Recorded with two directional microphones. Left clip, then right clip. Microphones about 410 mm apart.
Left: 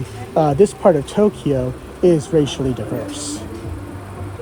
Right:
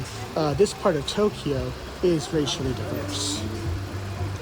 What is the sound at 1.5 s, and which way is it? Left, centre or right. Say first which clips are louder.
Speech: left 8 dB; left.